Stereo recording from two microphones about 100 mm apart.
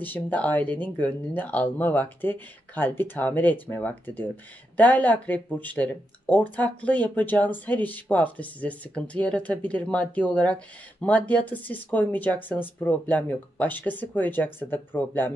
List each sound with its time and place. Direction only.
0.0 s speech: 15° left (ahead or behind)